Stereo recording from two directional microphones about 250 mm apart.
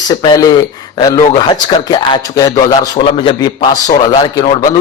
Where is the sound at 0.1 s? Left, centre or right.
Centre.